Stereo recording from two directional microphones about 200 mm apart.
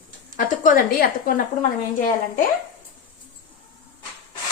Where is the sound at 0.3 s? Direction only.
40° left (ahead or behind).